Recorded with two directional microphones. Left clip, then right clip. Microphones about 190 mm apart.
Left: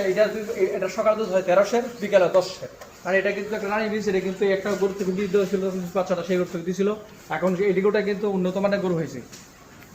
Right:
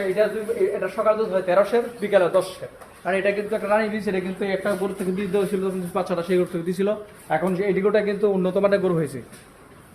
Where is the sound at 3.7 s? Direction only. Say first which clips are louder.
Right 2 dB; 65° right (ahead or behind).